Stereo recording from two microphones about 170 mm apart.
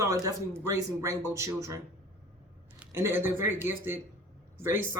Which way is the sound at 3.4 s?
15° right (ahead or behind).